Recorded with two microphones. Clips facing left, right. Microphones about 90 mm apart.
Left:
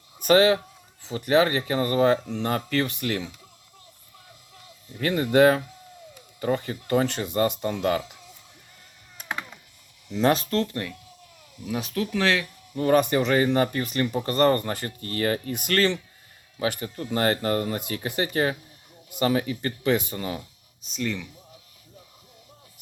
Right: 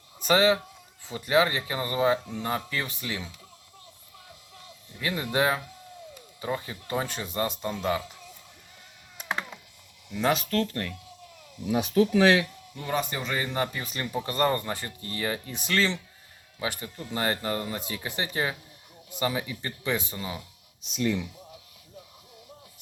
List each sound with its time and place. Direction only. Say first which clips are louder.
0.2 s a sound: left 5 dB; 55° left (ahead or behind)
1.0 s speech: left 3 dB; 65° left (ahead or behind)
4.9 s speech: left 8 dB; 60° left (ahead or behind)
10.3 s speech: left 2 dB; 25° left (ahead or behind)
11.6 s speech: right 5 dB; 20° right (ahead or behind)
12.7 s speech: left 10 dB; 55° left (ahead or behind)
20.9 s speech: right 2 dB; 10° right (ahead or behind)